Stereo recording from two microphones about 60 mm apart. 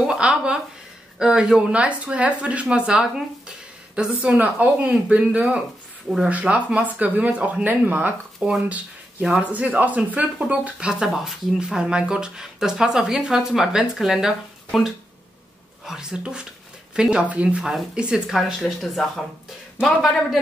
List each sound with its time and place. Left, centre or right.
0.0 s speech: centre
4.3 s speech: right
11.1 s speech: centre
18.3 s speech: centre